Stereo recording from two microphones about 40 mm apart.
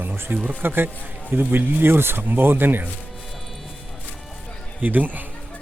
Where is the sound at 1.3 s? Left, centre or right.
Right.